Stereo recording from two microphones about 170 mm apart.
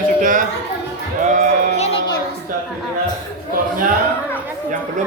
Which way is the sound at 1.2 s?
45° right (ahead or behind).